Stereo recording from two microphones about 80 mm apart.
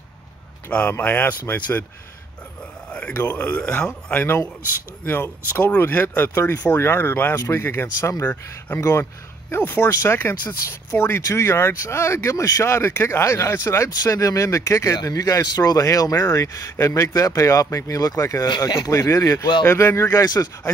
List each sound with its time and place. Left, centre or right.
0.7 s speech: centre
3.2 s speech: left
13.8 s speech: left